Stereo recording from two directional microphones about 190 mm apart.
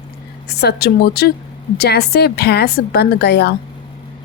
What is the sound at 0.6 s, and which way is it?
A woman's voice, 55° left (ahead or behind).